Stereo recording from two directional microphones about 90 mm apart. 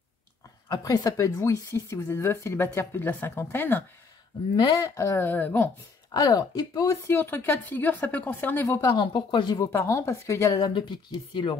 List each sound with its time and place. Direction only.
0.8 s speech: 40° left (ahead or behind); by 3.8 s 25° left (ahead or behind)
4.6 s speech: 40° left (ahead or behind); by 5.7 s 20° left (ahead or behind)
6.1 s speech: 50° left (ahead or behind)
6.9 s speech: 25° left (ahead or behind)
8.6 s speech: 35° left (ahead or behind)
8.9 s speech: 60° left (ahead or behind)
9.6 s speech: 30° left (ahead or behind)
10.6 s speech: 60° left (ahead or behind)